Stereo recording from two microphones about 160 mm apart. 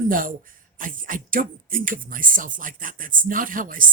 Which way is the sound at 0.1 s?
60° right (ahead or behind).